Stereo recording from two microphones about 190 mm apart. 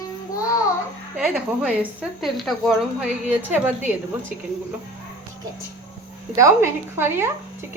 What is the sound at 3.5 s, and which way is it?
Speech, 10° right (ahead or behind).